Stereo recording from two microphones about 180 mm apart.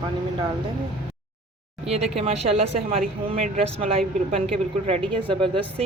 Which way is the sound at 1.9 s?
35° right (ahead or behind).